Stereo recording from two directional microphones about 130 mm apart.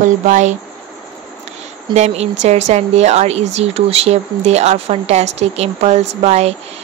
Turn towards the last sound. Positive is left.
turn(degrees=-55)  # may be behind; listen again after turning